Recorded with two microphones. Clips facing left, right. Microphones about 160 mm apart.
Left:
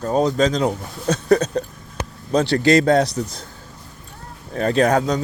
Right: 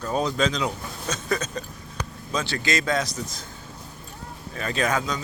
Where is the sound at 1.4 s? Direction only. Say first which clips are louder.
Left 9 dB; 65° left (ahead or behind).